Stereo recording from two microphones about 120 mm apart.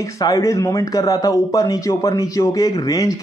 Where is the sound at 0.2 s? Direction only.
30° left (ahead or behind).